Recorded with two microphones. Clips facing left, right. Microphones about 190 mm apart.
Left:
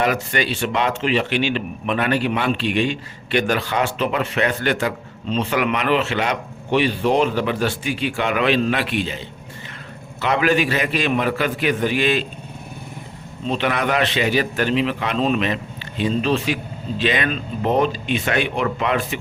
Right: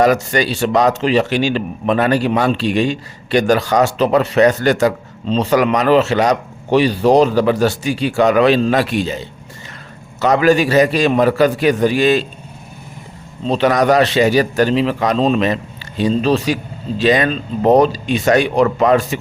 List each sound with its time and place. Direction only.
0.0 s a man's voice: 40° right (ahead or behind)
13.5 s a man's voice: 40° right (ahead or behind)